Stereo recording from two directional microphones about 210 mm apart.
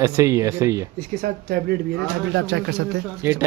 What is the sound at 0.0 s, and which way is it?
Speech, 15° right (ahead or behind).